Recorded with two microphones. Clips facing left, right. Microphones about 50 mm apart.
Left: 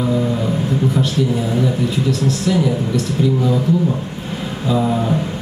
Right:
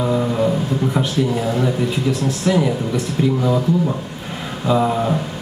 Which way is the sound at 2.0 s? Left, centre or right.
Centre.